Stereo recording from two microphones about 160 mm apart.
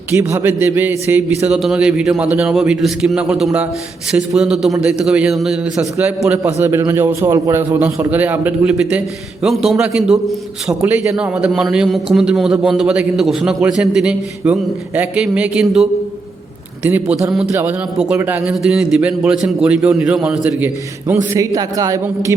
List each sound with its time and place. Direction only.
0.1 s a man's voice: 15° right (ahead or behind)
21.3 s speech: 20° right (ahead or behind)